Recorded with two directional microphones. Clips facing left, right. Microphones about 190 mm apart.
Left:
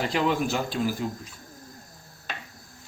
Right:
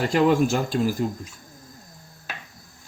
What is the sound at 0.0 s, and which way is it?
Speech, 45° right (ahead or behind).